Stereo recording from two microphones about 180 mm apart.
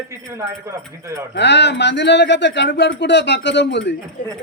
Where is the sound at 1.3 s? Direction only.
75° left (ahead or behind).